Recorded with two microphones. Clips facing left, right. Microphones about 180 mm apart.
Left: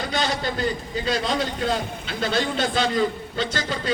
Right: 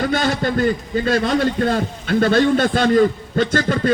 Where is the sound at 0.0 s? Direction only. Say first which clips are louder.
Right 6 dB; 55° right (ahead or behind).